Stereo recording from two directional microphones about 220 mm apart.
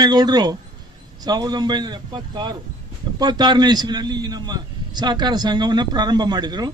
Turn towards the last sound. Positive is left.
turn(degrees=-20)  # may be behind; listen again after turning